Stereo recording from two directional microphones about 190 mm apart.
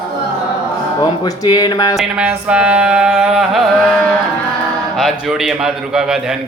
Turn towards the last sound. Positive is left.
turn(degrees=0)  # may be behind; listen again after turning